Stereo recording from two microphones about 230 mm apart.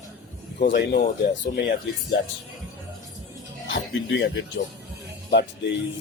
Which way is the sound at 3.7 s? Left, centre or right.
Left.